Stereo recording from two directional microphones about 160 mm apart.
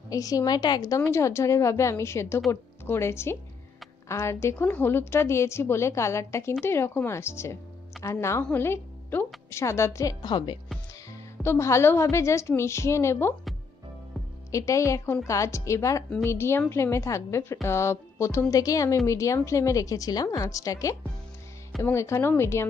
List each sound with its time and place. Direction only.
0.1 s a woman's voice: 20° left (ahead or behind)
11.4 s a woman's voice: 15° left (ahead or behind)
14.5 s a woman's voice: 20° left (ahead or behind)